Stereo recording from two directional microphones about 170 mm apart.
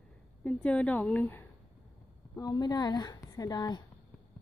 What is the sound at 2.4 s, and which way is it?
A woman's voice, 20° left (ahead or behind).